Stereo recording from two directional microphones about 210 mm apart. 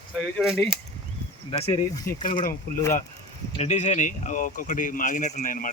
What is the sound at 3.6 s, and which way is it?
Speech, 35° left (ahead or behind).